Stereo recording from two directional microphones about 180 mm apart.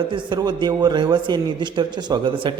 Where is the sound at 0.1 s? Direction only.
25° right (ahead or behind).